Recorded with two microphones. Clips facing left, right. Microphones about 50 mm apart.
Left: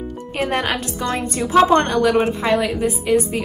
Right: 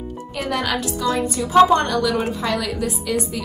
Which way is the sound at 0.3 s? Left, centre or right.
Left.